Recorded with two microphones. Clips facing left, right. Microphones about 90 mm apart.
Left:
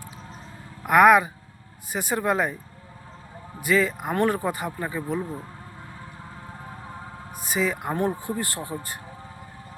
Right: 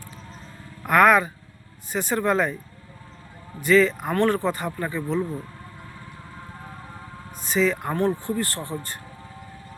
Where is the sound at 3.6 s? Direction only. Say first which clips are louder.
Right 4 dB; 10° left (ahead or behind).